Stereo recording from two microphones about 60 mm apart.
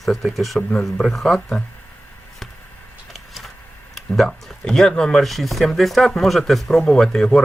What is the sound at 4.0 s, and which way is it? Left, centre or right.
A man's voice, centre.